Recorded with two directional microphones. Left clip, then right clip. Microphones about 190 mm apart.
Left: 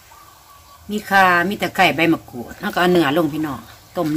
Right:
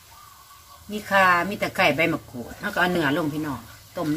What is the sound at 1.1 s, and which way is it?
Speech, 50° left (ahead or behind).